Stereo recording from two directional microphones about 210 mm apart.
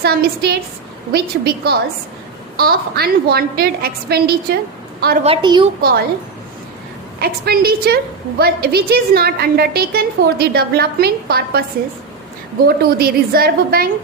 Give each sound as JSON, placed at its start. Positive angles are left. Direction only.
{"t": 0.0, "sound": "a woman's voice", "side_deg": -50}
{"t": 5.2, "sound": "a woman's voice", "side_deg": -25}
{"t": 5.8, "sound": "a woman's voice", "side_deg": -45}
{"t": 7.2, "sound": "a woman's voice", "side_deg": -45}
{"t": 12.6, "sound": "a woman's voice", "side_deg": -50}